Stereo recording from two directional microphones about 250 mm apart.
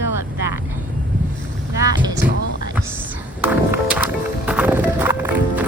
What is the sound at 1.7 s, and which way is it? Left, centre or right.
Speech, centre.